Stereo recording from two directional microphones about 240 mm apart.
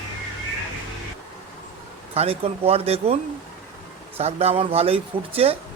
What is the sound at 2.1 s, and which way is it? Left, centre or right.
Speech, right.